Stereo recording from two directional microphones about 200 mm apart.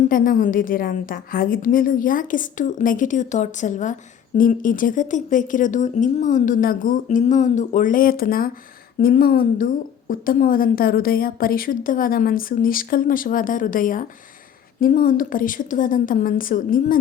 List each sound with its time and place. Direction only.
0.1 s a woman's voice: 40° left (ahead or behind)